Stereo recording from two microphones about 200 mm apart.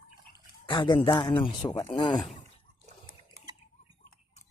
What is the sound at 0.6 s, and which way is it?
Speech, 25° left (ahead or behind).